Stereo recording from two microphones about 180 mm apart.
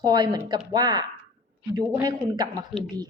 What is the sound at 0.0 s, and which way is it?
A woman's voice, 20° right (ahead or behind).